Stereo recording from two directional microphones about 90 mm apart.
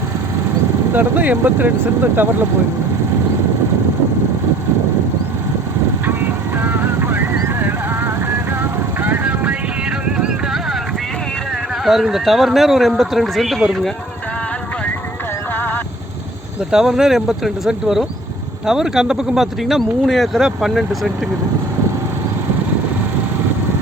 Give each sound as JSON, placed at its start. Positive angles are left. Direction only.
{"t": 0.9, "sound": "speech", "side_deg": -20}
{"t": 6.6, "sound": "clip-clop", "side_deg": -25}
{"t": 9.0, "sound": "vehicle", "side_deg": -20}
{"t": 10.1, "sound": "clip-clop", "side_deg": -10}
{"t": 11.9, "sound": "speech", "side_deg": -5}
{"t": 15.5, "sound": "vehicle", "side_deg": 20}
{"t": 16.7, "sound": "speech", "side_deg": -5}